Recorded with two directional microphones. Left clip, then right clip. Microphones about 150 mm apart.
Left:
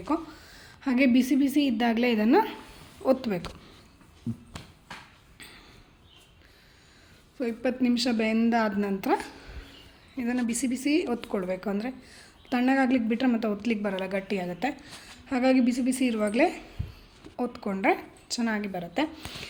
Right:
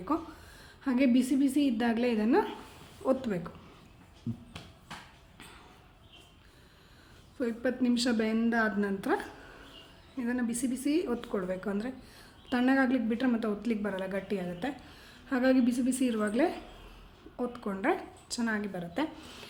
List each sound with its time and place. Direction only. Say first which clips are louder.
0.0 s a woman's voice: left 3 dB; 10° left (ahead or behind)
2.0 s speech: left 5 dB; 35° left (ahead or behind)
3.0 s a woman's voice: left 5 dB; 15° left (ahead or behind)
4.5 s a sound: left 3 dB; 60° left (ahead or behind)
7.6 s a woman's voice: left 4 dB; 15° left (ahead or behind)
12.1 s speech: left 3 dB; centre (ahead or behind)
12.9 s a woman's voice: left 4 dB; 15° left (ahead or behind)
15.3 s a woman's voice: left 3 dB; 5° left (ahead or behind)